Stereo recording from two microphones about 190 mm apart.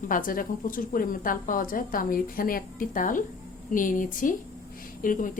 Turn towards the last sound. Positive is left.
turn(degrees=45)  # may be behind; listen again after turning